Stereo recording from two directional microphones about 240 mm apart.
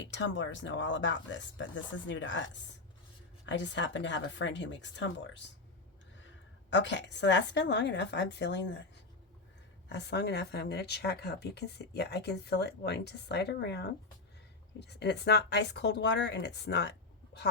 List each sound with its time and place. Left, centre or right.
0.0 s speech: left
3.4 s speech: left
9.9 s speech: left